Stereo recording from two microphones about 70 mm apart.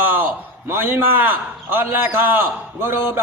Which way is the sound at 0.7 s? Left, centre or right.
Right.